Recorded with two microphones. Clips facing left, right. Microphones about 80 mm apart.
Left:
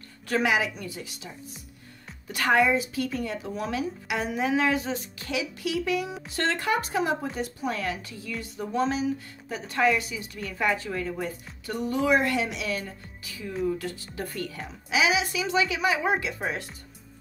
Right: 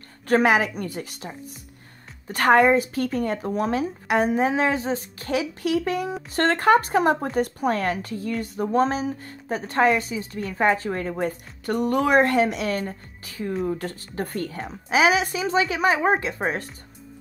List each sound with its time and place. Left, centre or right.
0.3 s a woman's voice: right